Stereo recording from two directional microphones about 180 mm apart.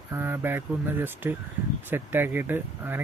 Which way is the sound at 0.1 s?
10° right (ahead or behind).